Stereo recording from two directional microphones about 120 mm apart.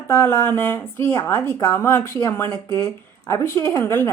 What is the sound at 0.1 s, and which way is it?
A woman's voice, 20° left (ahead or behind).